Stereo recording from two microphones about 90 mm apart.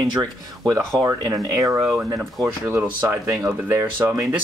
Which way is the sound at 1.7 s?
Centre (ahead or behind).